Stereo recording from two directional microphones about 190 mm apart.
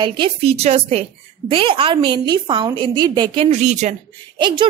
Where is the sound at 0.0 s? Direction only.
30° right (ahead or behind).